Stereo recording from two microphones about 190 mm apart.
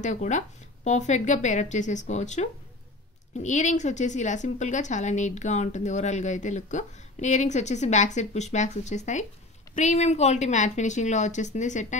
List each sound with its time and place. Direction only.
0.0 s a woman's voice: 40° left (ahead or behind)